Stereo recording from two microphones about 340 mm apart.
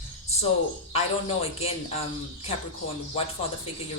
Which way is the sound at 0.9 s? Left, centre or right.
Centre.